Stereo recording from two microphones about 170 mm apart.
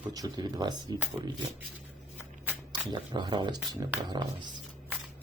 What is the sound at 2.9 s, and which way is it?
Speech, 25° right (ahead or behind).